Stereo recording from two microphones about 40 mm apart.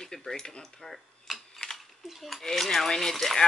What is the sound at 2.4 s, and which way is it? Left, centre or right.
Speech, centre.